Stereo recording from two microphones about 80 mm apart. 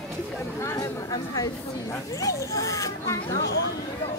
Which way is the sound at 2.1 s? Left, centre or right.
Left.